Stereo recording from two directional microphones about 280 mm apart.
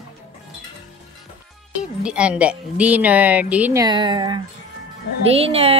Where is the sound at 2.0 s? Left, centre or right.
Centre.